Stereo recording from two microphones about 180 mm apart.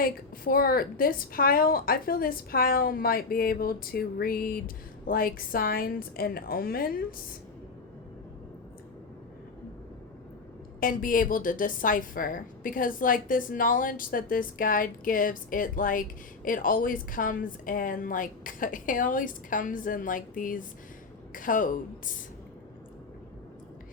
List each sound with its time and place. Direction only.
0.0 s a woman's voice: 55° left (ahead or behind)
10.8 s a woman's voice: 50° left (ahead or behind)